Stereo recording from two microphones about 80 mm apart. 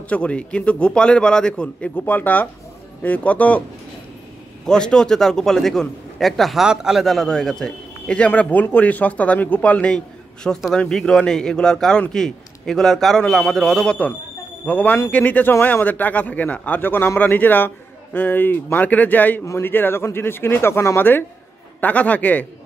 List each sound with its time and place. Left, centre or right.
0.1 s a man's voice: centre
2.0 s a man's voice: left
4.6 s a man's voice: centre
8.3 s a man's voice: left
21.8 s a man's voice: centre